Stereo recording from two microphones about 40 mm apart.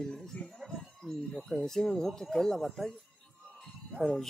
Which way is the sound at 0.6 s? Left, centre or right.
Centre.